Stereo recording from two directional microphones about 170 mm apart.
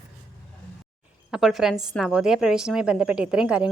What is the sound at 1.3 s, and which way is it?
A woman's voice, centre (ahead or behind).